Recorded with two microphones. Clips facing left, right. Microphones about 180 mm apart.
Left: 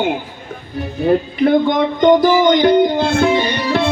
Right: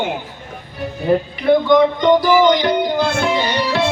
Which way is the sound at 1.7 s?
50° left (ahead or behind).